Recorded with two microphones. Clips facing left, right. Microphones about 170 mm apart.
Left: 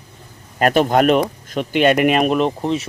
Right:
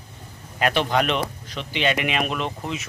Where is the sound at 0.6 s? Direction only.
45° left (ahead or behind).